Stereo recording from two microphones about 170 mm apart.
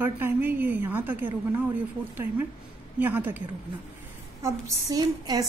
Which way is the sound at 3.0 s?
10° right (ahead or behind).